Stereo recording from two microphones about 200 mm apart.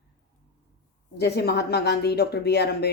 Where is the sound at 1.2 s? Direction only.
55° left (ahead or behind).